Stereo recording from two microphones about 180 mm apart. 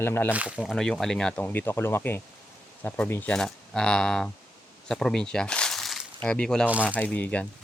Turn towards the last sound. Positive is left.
turn(degrees=5)  # may be behind; listen again after turning